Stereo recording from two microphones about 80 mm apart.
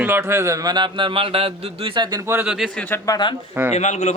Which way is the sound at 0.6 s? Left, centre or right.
Right.